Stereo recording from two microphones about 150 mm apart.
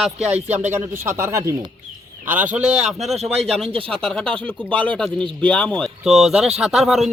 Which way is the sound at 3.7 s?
35° right (ahead or behind).